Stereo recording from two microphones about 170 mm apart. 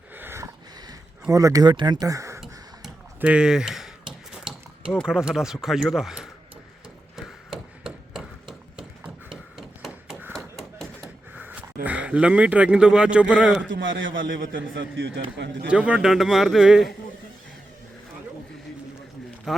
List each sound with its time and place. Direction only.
0.2 s a sound: 15° right (ahead or behind)
1.3 s speech: 20° right (ahead or behind)
2.4 s tick-tock: 5° right (ahead or behind)
4.3 s cutlery: 5° right (ahead or behind)
5.6 s a man's voice: centre (ahead or behind)
7.2 s hammer: centre (ahead or behind)
9.6 s a sound: centre (ahead or behind)
10.3 s thump: centre (ahead or behind)
11.3 s speech: 10° right (ahead or behind)
13.8 s a man's voice: 90° right
15.7 s a man's voice: 5° right (ahead or behind)
19.5 s a man's voice: centre (ahead or behind)